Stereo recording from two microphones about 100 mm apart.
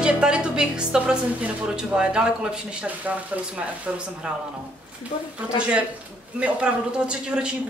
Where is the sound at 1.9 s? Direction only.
10° right (ahead or behind).